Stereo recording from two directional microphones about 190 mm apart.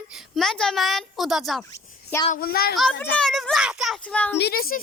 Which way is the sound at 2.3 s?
50° left (ahead or behind).